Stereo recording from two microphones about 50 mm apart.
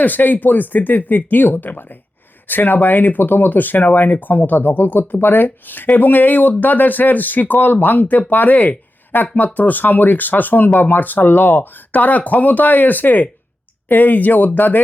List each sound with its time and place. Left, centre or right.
0.0 s speech: left